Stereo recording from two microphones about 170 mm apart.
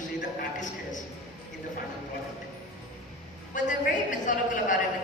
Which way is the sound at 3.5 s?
50° left (ahead or behind).